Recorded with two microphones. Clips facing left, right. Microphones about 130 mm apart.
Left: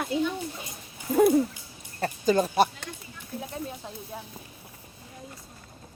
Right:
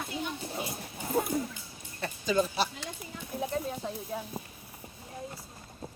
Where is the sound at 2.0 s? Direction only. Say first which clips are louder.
Left 5 dB; 45° left (ahead or behind).